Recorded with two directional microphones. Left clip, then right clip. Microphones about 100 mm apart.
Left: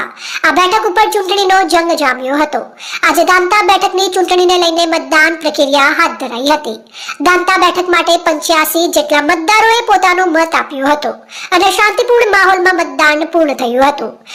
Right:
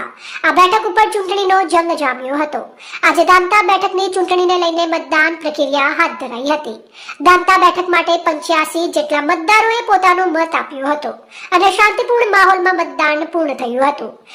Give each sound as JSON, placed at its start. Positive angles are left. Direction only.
{"t": 0.4, "sound": "a woman's voice", "side_deg": 20}